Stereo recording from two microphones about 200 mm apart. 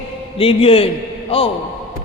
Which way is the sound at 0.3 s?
30° left (ahead or behind).